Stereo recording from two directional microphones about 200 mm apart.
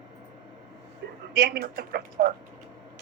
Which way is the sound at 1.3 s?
50° right (ahead or behind).